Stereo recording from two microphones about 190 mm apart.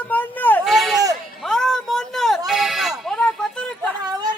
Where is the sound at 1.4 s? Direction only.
5° left (ahead or behind).